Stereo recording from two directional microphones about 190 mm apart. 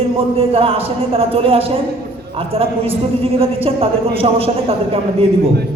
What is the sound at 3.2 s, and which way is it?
Speech, 30° right (ahead or behind).